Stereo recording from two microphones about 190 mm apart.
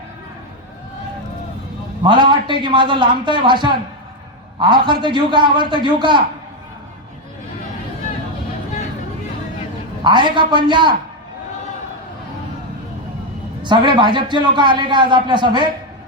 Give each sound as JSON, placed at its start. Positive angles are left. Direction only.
{"t": 2.0, "sound": "a man's voice", "side_deg": -25}
{"t": 10.0, "sound": "a man's voice", "side_deg": -25}
{"t": 13.6, "sound": "a man's voice", "side_deg": -25}